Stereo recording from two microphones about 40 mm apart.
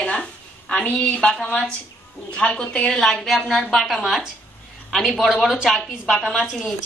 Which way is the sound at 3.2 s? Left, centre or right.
Centre.